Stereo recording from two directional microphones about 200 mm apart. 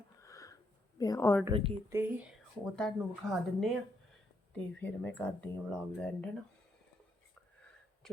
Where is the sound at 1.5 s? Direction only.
30° right (ahead or behind).